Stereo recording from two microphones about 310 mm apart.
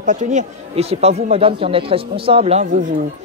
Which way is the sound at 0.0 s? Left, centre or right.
Right.